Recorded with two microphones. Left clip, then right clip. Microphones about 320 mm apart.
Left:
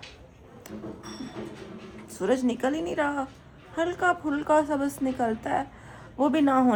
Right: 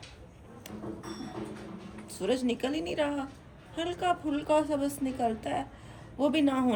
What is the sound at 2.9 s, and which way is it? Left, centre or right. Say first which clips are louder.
Speech: left 4 dB; centre.